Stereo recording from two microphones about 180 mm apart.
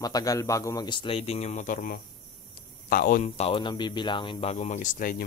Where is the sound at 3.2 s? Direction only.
35° left (ahead or behind).